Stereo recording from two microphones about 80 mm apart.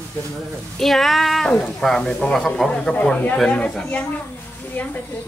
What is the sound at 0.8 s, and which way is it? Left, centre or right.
Speech, centre.